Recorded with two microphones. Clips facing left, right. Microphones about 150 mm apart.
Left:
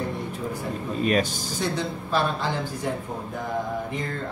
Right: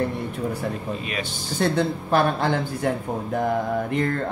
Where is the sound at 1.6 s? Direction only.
60° right (ahead or behind).